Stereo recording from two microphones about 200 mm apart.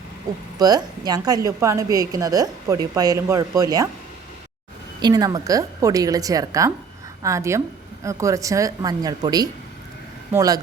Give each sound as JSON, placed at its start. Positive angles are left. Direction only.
{"t": 0.6, "sound": "a woman's voice", "side_deg": -20}
{"t": 4.9, "sound": "a woman's voice", "side_deg": -20}